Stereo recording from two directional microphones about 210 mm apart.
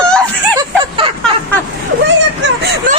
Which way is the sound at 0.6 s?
25° right (ahead or behind).